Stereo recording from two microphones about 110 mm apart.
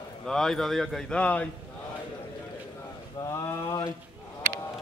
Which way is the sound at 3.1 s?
30° left (ahead or behind).